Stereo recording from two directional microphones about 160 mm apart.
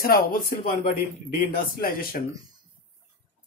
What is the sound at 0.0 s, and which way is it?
Speech, 70° left (ahead or behind).